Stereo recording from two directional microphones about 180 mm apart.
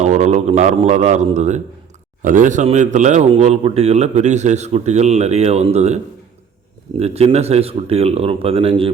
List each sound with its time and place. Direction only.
0.0 s a man's voice: 40° right (ahead or behind)
7.0 s a man's voice: 35° right (ahead or behind)